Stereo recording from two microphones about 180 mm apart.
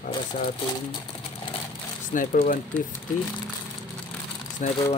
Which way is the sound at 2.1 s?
45° left (ahead or behind).